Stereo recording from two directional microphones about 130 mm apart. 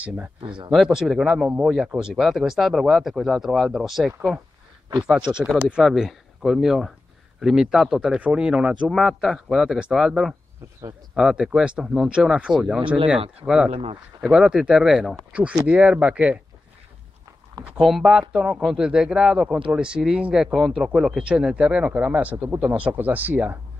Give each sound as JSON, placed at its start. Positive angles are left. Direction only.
{"t": 0.0, "sound": "speech", "side_deg": -10}
{"t": 0.4, "sound": "speech", "side_deg": -40}
{"t": 0.7, "sound": "speech", "side_deg": -5}
{"t": 13.7, "sound": "speech", "side_deg": -50}
{"t": 14.2, "sound": "speech", "side_deg": -5}
{"t": 17.7, "sound": "speech", "side_deg": -5}